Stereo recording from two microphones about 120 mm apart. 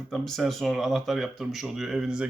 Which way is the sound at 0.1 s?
Centre (ahead or behind).